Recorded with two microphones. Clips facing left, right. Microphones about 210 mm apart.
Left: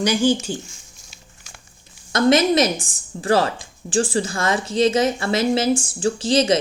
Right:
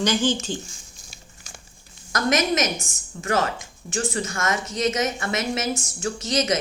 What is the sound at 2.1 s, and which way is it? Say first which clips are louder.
A woman's voice: left 6 dB; 30° left (ahead or behind).